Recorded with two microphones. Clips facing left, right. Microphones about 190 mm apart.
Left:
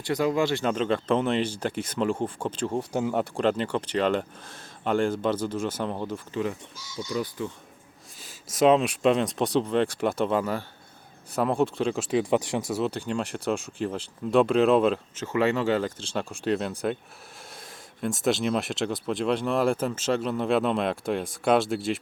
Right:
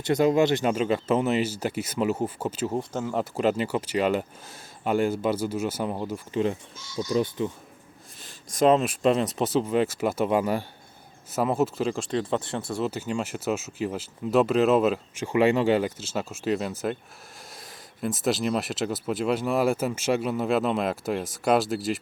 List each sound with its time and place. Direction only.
0.0 s speech: 20° right (ahead or behind); by 2.8 s 5° right (ahead or behind)
2.9 s speech: 15° left (ahead or behind)
3.2 s speech: 5° right (ahead or behind)
7.1 s speech: 25° right (ahead or behind)
8.2 s speech: centre (ahead or behind); by 10.7 s 15° right (ahead or behind)
11.3 s speech: 5° right (ahead or behind)
12.8 s speech: 5° right (ahead or behind)
18.0 s speech: centre (ahead or behind)